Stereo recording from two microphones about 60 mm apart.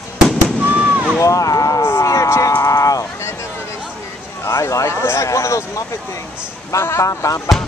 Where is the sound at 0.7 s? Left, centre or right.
Right.